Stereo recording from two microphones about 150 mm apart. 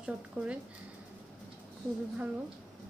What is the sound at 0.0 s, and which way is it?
Speech, 5° right (ahead or behind).